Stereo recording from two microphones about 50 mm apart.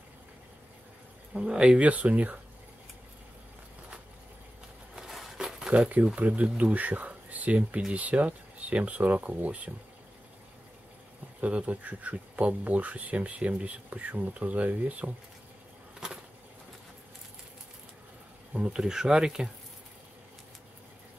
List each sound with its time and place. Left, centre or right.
1.3 s speech: centre
4.9 s a sound: centre
6.1 s speech: right
11.4 s speech: right
18.5 s speech: centre